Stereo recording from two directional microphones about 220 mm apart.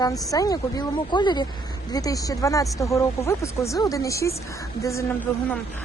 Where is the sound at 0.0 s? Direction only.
15° left (ahead or behind).